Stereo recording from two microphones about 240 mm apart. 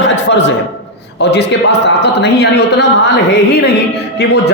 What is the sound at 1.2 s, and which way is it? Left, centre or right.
A man's voice, left.